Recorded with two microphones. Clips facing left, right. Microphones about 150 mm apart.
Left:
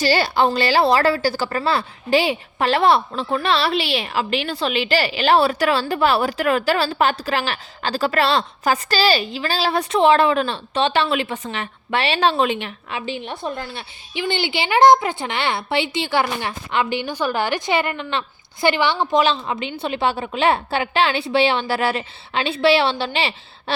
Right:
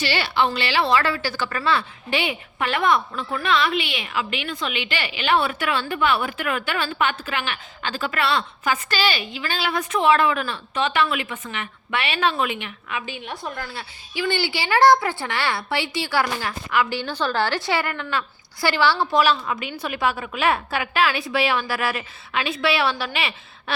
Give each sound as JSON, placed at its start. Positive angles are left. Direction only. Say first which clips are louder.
{"t": 0.0, "sound": "a woman's voice", "louder": "left 5 dB", "side_deg": 40}